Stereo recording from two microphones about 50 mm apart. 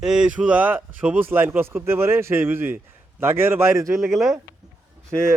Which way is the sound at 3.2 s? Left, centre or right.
Right.